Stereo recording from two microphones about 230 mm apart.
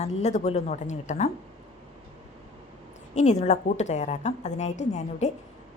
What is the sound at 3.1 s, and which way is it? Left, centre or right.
A woman's voice, left.